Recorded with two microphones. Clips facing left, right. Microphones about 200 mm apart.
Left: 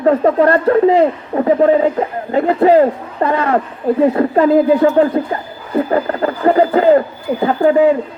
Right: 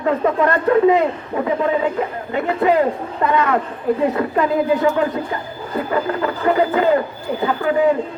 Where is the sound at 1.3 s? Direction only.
40° left (ahead or behind).